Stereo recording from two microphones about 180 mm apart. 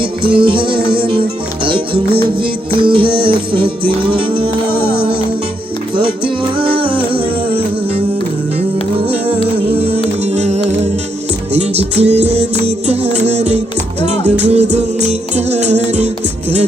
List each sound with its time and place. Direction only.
0.3 s music: 30° right (ahead or behind)
6.0 s music: 30° right (ahead or behind)
10.2 s music: 40° right (ahead or behind)